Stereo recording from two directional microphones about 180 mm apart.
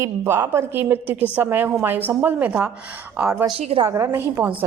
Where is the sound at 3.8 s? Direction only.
15° right (ahead or behind).